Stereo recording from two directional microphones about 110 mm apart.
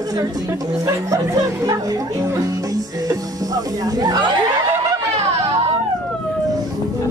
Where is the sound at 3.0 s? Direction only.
35° right (ahead or behind).